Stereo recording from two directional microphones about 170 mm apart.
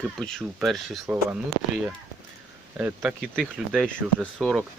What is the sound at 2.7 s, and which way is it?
Speech, 10° right (ahead or behind).